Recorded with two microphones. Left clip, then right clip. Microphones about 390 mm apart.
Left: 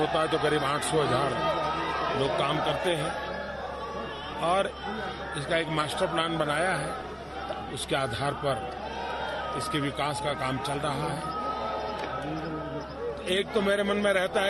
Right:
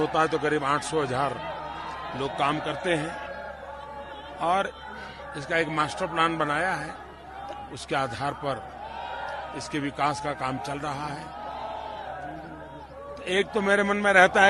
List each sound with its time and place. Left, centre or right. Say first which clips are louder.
0.1 s a man's voice: right 1 dB; right
2.2 s a man's voice: right 4 dB; right
4.4 s a man's voice: right 1 dB; right
5.5 s a man's voice: right 3 dB; right
7.9 s a man's voice: right 1 dB; right
9.7 s a man's voice: right 6 dB; right
13.2 s a man's voice: right 3 dB; right